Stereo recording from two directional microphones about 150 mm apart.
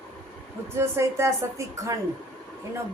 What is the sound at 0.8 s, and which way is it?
A woman's voice, 15° right (ahead or behind).